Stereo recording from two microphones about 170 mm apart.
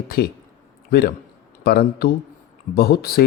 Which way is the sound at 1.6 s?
65° left (ahead or behind).